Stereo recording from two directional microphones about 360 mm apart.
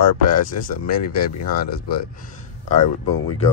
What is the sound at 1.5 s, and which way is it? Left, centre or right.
Speech, left.